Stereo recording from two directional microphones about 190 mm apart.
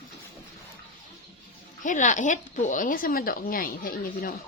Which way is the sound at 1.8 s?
40° left (ahead or behind).